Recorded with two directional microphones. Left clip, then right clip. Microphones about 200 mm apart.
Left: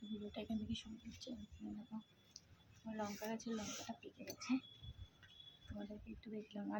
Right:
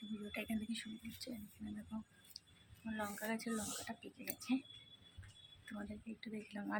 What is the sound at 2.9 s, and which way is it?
Speech, 15° right (ahead or behind).